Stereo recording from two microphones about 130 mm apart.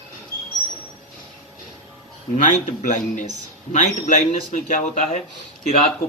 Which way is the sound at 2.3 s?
75° left (ahead or behind).